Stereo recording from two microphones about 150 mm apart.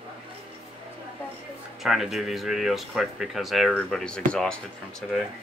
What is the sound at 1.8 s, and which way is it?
Speech, centre (ahead or behind).